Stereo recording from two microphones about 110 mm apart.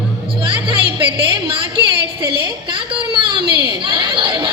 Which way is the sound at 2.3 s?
50° right (ahead or behind).